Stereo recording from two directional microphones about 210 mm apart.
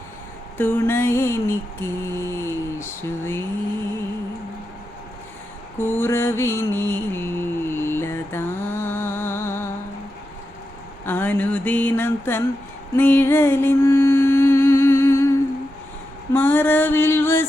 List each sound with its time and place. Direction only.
0.6 s mantra: 10° left (ahead or behind)
5.8 s mantra: 10° left (ahead or behind)
11.0 s a sound: 10° left (ahead or behind)
13.0 s music: 10° left (ahead or behind)
16.3 s mantra: 10° left (ahead or behind)